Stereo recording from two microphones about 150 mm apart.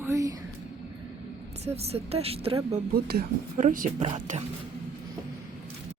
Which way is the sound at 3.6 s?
65° right (ahead or behind).